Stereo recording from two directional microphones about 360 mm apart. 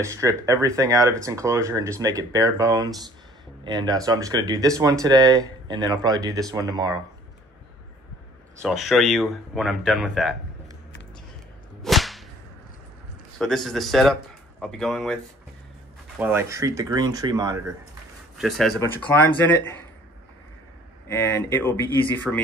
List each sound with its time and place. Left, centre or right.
0.0 s speech: centre
8.5 s speech: centre
11.8 s whip: centre
13.4 s speech: centre
16.2 s speech: centre
18.4 s speech: centre
21.1 s speech: centre